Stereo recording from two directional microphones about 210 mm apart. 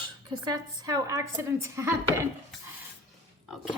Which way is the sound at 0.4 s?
15° right (ahead or behind).